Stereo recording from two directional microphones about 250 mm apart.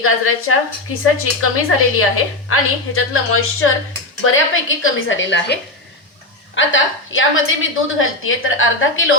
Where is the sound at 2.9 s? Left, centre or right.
Left.